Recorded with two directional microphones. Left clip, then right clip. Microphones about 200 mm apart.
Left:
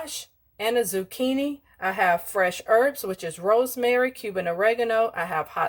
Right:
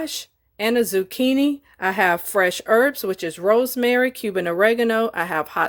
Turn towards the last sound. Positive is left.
turn(degrees=-50)  # may be behind; listen again after turning